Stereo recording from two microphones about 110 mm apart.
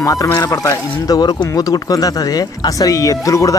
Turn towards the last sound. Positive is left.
turn(degrees=30)  # may be behind; listen again after turning